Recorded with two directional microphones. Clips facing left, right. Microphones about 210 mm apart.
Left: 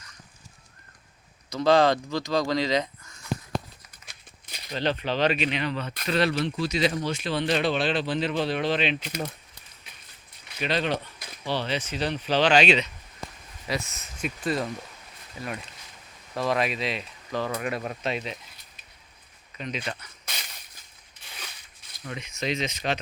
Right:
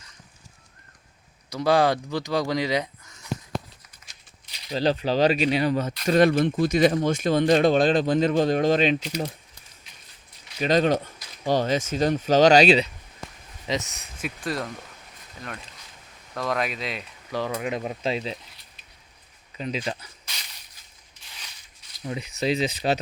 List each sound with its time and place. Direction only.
1.5 s speech: 15° right (ahead or behind)
4.0 s a sound: 55° left (ahead or behind)
4.7 s speech: 35° right (ahead or behind)
10.6 s speech: 40° right (ahead or behind)
13.7 s speech: 20° right (ahead or behind)
14.2 s speech: centre (ahead or behind)
16.3 s speech: centre (ahead or behind)
17.3 s speech: 10° right (ahead or behind)
18.0 s speech: 30° right (ahead or behind)
19.5 s speech: 30° right (ahead or behind)
21.2 s mechanisms: 55° left (ahead or behind)
22.0 s speech: 35° right (ahead or behind)